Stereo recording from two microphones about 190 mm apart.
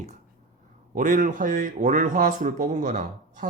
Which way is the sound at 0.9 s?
45° right (ahead or behind).